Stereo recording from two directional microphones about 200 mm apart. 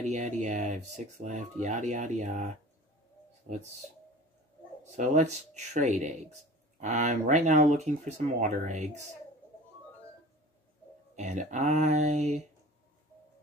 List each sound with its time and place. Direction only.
0.0 s speech: 35° right (ahead or behind)
4.9 s speech: 35° right (ahead or behind)
11.1 s speech: 35° right (ahead or behind)